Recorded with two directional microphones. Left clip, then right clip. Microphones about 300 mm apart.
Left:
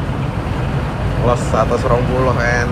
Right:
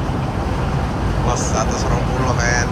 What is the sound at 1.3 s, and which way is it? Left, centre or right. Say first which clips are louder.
Speech: left 5 dB; centre.